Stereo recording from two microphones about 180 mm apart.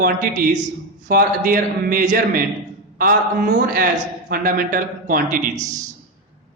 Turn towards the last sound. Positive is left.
turn(degrees=-40)  # may be behind; listen again after turning